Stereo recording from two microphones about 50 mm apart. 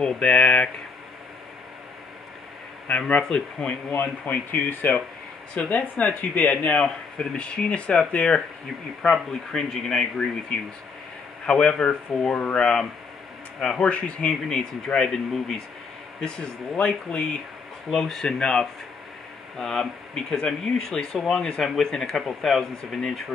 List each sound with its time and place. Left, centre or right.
0.0 s speech: left
3.2 s speech: centre
3.9 s speech: left
9.0 s speech: centre
11.4 s speech: centre
13.8 s speech: left
15.0 s speech: centre